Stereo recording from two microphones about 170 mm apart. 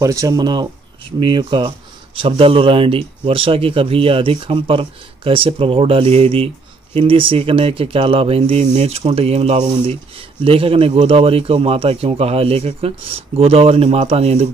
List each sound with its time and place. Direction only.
0.0 s speech: 20° right (ahead or behind); by 14.5 s 40° right (ahead or behind)